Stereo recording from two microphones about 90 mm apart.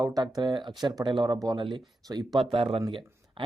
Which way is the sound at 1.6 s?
65° right (ahead or behind).